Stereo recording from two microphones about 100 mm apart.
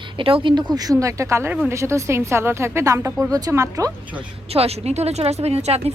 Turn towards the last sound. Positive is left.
turn(degrees=-90)